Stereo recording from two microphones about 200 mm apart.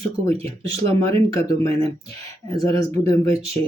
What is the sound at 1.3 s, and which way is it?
Speech, 15° left (ahead or behind).